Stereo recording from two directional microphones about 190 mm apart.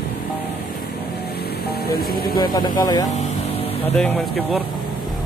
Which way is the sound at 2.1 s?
50° left (ahead or behind).